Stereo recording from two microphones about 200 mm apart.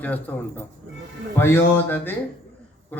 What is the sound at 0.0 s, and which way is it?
Speech, 10° left (ahead or behind).